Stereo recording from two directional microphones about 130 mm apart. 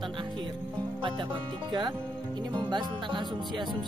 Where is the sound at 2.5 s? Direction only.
35° right (ahead or behind).